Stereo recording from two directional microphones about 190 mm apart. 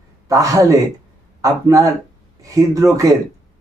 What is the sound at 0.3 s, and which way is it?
A man's voice, 15° right (ahead or behind).